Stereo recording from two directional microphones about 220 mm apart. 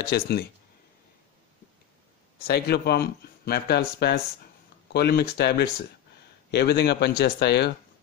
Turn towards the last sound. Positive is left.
turn(degrees=50)  # may be behind; listen again after turning